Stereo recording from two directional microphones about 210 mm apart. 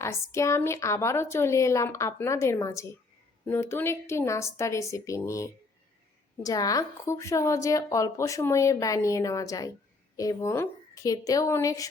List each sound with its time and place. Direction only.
0.0 s a woman's voice: 15° left (ahead or behind)